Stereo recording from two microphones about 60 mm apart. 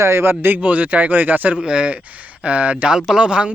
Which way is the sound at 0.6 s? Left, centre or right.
Right.